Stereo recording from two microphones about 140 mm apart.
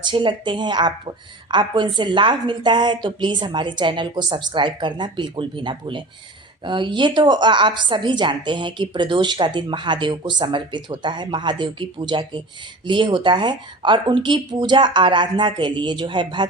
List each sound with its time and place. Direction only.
0.0 s a woman's voice: 35° right (ahead or behind)